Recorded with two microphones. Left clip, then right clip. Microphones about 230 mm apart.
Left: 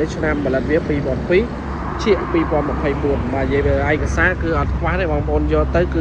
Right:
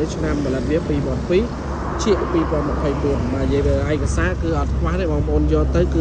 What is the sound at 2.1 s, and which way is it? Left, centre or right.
Speech, left.